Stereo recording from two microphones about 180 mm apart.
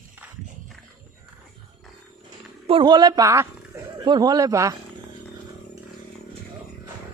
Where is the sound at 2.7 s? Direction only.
25° right (ahead or behind).